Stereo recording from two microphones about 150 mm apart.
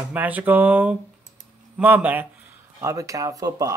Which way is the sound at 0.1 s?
10° right (ahead or behind).